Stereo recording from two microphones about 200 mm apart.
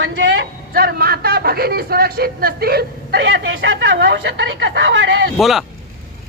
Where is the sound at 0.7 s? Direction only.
50° right (ahead or behind).